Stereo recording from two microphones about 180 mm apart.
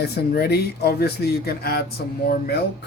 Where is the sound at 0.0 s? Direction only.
60° left (ahead or behind).